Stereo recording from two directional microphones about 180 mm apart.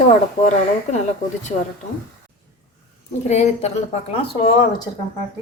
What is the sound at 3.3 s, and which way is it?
Speech, 40° left (ahead or behind).